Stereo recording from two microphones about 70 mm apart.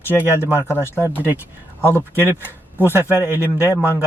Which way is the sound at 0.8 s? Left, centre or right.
Left.